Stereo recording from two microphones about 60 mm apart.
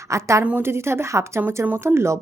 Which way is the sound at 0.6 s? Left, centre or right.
Right.